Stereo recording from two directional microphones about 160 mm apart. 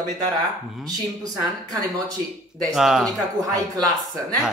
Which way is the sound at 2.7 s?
5° right (ahead or behind).